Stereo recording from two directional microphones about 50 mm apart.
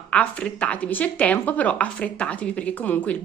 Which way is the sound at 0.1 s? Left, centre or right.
Left.